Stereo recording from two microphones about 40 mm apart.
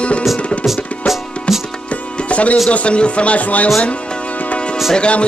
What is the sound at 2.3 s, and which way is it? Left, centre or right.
Speech, left.